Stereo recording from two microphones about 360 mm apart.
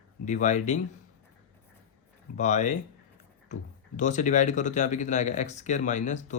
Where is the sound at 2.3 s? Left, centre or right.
Centre.